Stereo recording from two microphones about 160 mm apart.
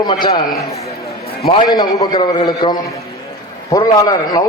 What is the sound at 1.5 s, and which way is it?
A man's voice, 25° left (ahead or behind).